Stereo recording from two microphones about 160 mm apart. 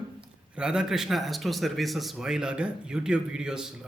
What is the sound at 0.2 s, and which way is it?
A man's voice, 5° right (ahead or behind).